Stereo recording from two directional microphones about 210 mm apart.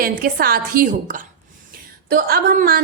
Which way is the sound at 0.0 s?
45° right (ahead or behind).